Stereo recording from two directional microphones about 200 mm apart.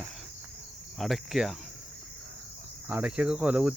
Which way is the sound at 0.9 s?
Centre (ahead or behind).